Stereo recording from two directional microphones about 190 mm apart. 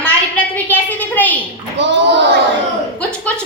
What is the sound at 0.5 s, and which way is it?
Speech, 10° left (ahead or behind).